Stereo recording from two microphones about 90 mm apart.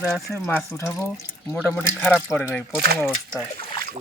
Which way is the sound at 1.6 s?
20° left (ahead or behind).